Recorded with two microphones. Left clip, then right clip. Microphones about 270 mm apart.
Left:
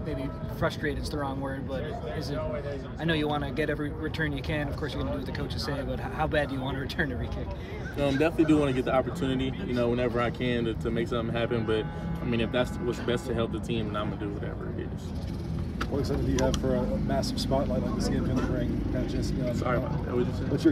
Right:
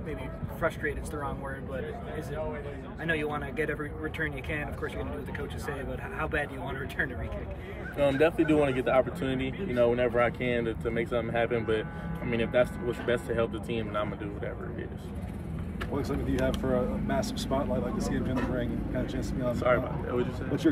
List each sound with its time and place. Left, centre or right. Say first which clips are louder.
0.6 s speech: even; left
3.0 s speech: left 2 dB; left
5.7 s speech: left 2 dB; left
8.0 s speech: right 1 dB; centre
16.0 s speech: left 2 dB; right
19.6 s speech: right 6 dB; centre